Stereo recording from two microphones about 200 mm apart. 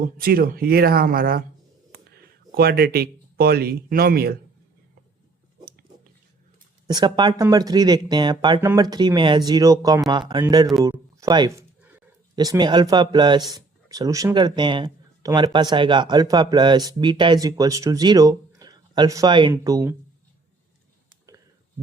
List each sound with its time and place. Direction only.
0.0 s speech: 45° right (ahead or behind)
6.8 s speech: 20° right (ahead or behind)